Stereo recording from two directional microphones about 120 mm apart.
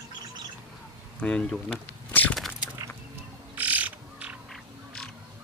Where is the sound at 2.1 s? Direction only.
15° left (ahead or behind).